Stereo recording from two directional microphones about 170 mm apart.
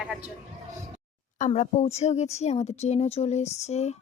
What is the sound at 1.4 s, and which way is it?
Speech, 45° left (ahead or behind).